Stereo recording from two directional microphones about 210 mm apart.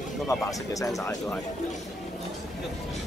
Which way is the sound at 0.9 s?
10° left (ahead or behind).